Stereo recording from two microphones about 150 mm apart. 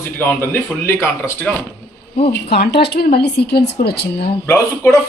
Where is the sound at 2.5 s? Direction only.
90° left.